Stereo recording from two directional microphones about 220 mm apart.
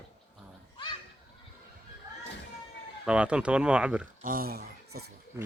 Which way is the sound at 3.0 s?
5° right (ahead or behind).